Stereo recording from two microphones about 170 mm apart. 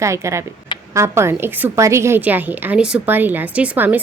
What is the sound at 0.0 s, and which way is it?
A woman's voice, 15° right (ahead or behind).